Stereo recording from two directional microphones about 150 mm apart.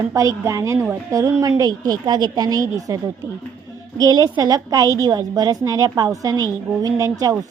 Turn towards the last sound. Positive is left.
turn(degrees=-20)  # may be behind; listen again after turning